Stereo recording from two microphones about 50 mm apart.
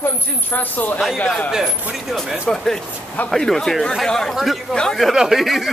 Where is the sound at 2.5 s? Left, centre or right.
Centre.